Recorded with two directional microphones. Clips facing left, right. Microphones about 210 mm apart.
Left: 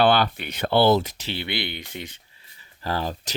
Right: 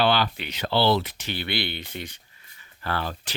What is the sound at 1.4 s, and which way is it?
Speech, 20° left (ahead or behind).